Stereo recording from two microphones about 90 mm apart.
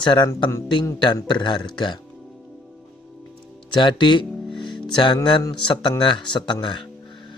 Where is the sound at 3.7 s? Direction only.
65° left (ahead or behind).